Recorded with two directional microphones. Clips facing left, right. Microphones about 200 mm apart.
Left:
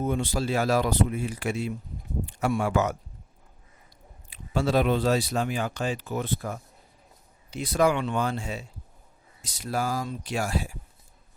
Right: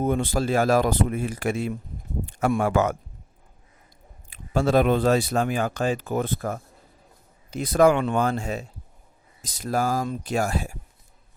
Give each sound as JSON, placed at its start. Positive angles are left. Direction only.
{"t": 0.0, "sound": "speech", "side_deg": -55}
{"t": 4.3, "sound": "speech", "side_deg": -50}
{"t": 9.6, "sound": "speech", "side_deg": -45}